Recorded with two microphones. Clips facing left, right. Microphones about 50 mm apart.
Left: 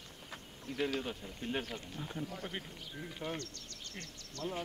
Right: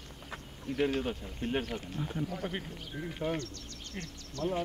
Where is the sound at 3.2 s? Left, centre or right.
Right.